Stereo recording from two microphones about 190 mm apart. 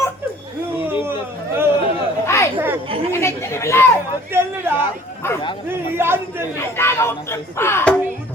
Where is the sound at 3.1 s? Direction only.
15° left (ahead or behind).